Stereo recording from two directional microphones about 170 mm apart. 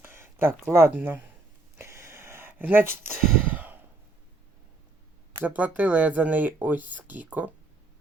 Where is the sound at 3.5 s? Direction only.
10° right (ahead or behind).